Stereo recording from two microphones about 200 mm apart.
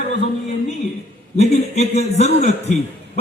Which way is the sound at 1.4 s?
35° left (ahead or behind).